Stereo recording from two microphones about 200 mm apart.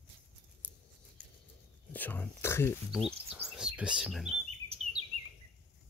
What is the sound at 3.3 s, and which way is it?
Chirp, 5° right (ahead or behind).